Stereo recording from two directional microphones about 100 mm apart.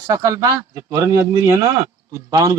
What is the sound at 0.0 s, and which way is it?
Speech, 30° right (ahead or behind).